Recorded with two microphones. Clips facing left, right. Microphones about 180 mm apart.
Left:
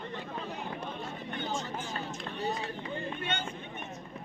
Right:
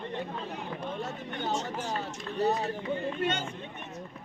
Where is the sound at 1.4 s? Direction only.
75° right (ahead or behind).